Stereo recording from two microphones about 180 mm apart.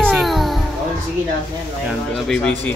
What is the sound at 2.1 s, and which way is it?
Speech, 5° left (ahead or behind).